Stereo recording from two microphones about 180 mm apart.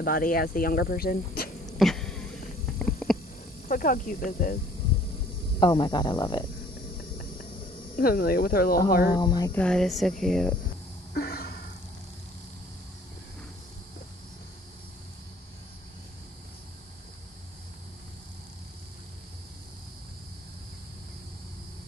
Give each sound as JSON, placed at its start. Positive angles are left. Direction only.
{"t": 0.0, "sound": "speech", "side_deg": 50}
{"t": 1.8, "sound": "a sound", "side_deg": 0}
{"t": 3.6, "sound": "speech", "side_deg": 45}
{"t": 5.6, "sound": "speech", "side_deg": 25}
{"t": 7.9, "sound": "speech", "side_deg": 55}
{"t": 9.1, "sound": "speech", "side_deg": 25}
{"t": 9.6, "sound": "speech", "side_deg": 5}
{"t": 11.1, "sound": "a sound", "side_deg": 60}